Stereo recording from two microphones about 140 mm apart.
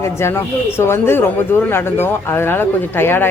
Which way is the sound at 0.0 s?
20° left (ahead or behind).